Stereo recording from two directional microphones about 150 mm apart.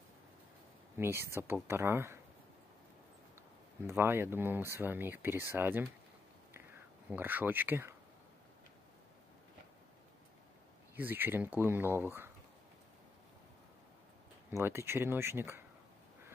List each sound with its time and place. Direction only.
0.9 s speech: 15° right (ahead or behind)
3.8 s speech: 15° right (ahead or behind)
6.5 s a sound: 15° right (ahead or behind)
11.0 s speech: 15° right (ahead or behind)
14.5 s speech: 15° right (ahead or behind)